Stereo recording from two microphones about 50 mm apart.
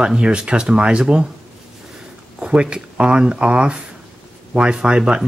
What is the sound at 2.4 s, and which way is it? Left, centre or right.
Speech, centre.